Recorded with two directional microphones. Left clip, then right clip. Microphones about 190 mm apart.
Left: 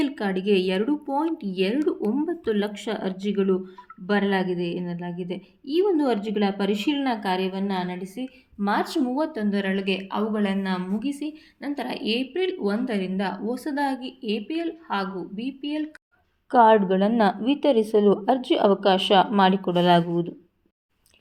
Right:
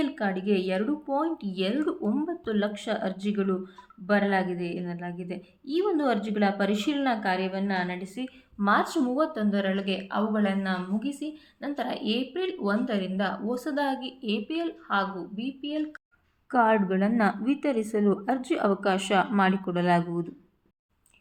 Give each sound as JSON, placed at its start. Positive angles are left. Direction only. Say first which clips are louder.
{"t": 0.0, "sound": "a woman's voice", "louder": "left 3 dB", "side_deg": 20}